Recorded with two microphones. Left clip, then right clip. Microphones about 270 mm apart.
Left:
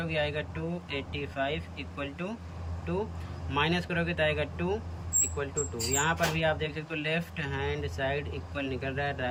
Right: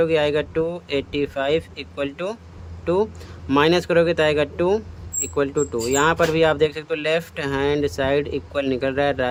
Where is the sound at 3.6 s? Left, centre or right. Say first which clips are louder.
Right 13 dB; centre.